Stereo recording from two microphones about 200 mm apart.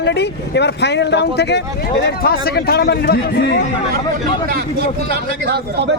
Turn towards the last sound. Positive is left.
turn(degrees=-55)  # may be behind; listen again after turning